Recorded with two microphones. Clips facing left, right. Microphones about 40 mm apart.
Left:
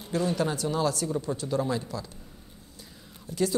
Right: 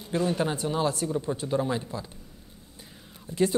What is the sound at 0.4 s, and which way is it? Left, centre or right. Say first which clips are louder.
Speech: even; right.